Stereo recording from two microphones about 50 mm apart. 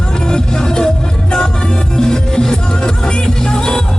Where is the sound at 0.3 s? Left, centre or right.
Centre.